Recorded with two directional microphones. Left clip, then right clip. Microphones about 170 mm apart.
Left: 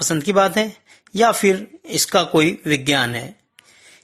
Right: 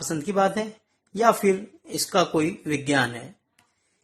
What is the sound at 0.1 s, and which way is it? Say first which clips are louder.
Speech: left 6 dB; 30° left (ahead or behind).